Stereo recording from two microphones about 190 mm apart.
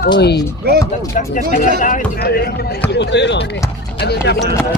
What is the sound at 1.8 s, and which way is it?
Speech, 45° left (ahead or behind).